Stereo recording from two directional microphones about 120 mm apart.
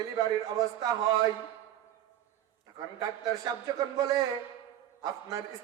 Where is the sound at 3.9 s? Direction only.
35° right (ahead or behind).